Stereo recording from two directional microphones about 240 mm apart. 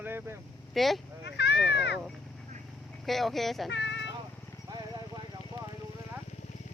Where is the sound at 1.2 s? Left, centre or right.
Left.